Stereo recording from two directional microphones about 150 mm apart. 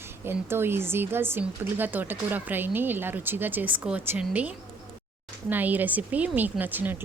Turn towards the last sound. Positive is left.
turn(degrees=-10)  # may be behind; listen again after turning